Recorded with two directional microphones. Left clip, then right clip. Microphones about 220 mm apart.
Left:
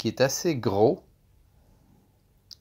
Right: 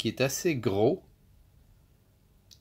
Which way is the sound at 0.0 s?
20° left (ahead or behind).